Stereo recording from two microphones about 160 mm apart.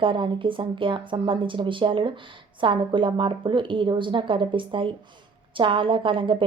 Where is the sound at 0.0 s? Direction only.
30° right (ahead or behind).